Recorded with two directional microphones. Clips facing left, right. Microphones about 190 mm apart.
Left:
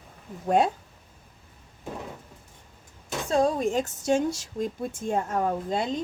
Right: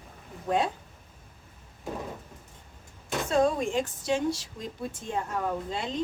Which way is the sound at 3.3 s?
40° left (ahead or behind).